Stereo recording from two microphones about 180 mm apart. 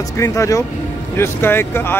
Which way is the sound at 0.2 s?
15° left (ahead or behind).